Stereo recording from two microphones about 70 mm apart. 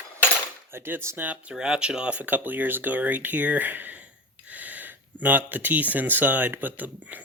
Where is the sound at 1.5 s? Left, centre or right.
Centre.